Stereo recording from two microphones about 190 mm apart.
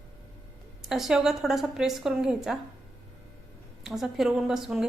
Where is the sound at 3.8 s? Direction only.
Centre (ahead or behind).